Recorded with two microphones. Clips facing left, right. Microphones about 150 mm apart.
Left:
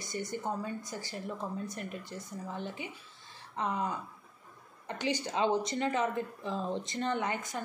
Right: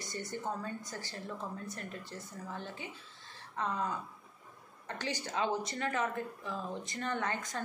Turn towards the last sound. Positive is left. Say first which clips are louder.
# left 3 dB
turn(degrees=10)  # may be behind; listen again after turning